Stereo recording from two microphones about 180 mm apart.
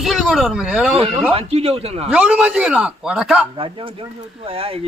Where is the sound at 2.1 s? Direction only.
5° right (ahead or behind).